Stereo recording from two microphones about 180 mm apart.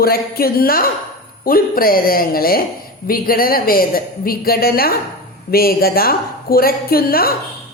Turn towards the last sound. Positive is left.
turn(degrees=55)  # may be behind; listen again after turning